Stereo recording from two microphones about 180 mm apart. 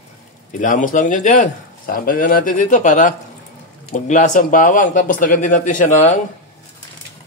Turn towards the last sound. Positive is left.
turn(degrees=40)  # may be behind; listen again after turning